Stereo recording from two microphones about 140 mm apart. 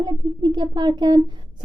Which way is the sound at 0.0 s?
30° right (ahead or behind).